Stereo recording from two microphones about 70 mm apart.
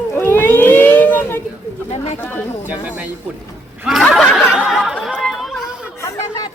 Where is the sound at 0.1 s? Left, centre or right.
Left.